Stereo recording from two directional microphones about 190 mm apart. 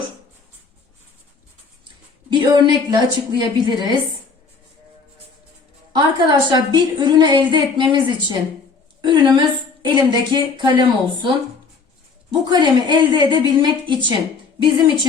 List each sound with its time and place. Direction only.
2.3 s a woman's voice: 25° right (ahead or behind)
5.9 s a woman's voice: 20° right (ahead or behind)